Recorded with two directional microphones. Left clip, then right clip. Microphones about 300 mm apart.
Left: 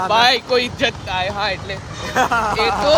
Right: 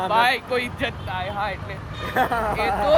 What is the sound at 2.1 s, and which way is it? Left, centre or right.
Speech, centre.